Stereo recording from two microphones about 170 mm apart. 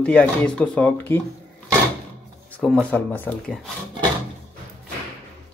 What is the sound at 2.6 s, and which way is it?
Speech, 10° left (ahead or behind).